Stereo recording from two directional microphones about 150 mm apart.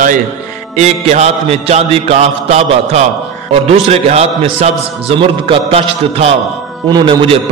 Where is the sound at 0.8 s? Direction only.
50° right (ahead or behind).